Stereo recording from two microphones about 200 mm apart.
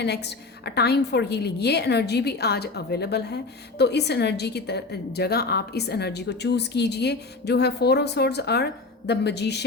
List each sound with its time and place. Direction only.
0.0 s a woman's voice: 55° left (ahead or behind)